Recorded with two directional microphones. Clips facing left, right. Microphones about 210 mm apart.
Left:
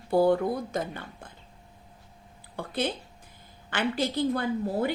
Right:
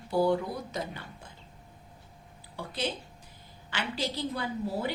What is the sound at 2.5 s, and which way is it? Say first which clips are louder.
A woman's voice: left 4 dB; 55° left (ahead or behind).